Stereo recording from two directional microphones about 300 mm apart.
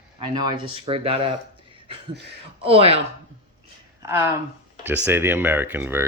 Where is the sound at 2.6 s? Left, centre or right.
Centre.